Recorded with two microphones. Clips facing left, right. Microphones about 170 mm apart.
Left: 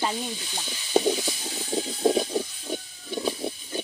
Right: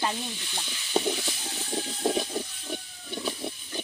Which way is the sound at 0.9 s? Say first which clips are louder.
Left 5 dB; 40° left (ahead or behind).